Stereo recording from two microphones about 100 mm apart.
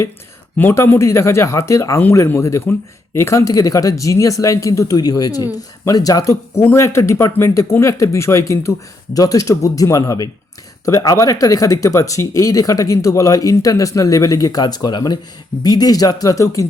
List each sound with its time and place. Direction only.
0.5 s speech: 20° left (ahead or behind)